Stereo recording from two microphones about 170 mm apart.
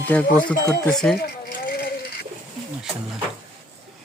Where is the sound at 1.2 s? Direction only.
65° left (ahead or behind).